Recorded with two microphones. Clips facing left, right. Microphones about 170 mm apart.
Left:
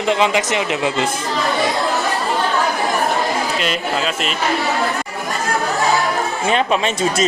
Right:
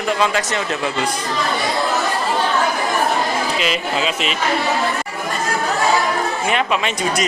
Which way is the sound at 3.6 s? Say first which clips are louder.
Even; centre (ahead or behind).